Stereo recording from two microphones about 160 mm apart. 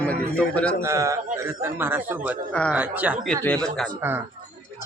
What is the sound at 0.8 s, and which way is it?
A man's voice, 20° right (ahead or behind).